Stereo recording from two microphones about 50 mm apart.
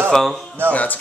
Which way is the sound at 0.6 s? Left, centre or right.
Right.